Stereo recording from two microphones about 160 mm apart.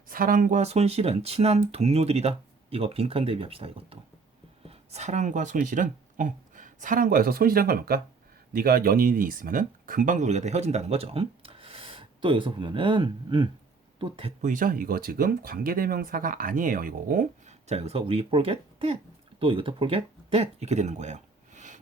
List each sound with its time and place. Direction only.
0.1 s speech: 60° right (ahead or behind); by 14.3 s 35° right (ahead or behind)
14.4 s speech: 55° right (ahead or behind)
17.7 s speech: 40° right (ahead or behind)